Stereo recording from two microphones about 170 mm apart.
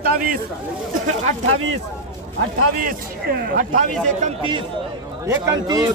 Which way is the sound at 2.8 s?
60° right (ahead or behind).